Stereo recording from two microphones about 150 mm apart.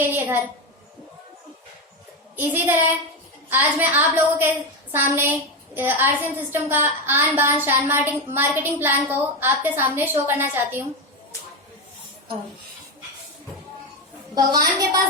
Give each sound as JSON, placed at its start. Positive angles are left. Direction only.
{"t": 0.0, "sound": "a sound", "side_deg": -15}
{"t": 2.3, "sound": "a woman's voice", "side_deg": -15}
{"t": 14.3, "sound": "a woman's voice", "side_deg": -25}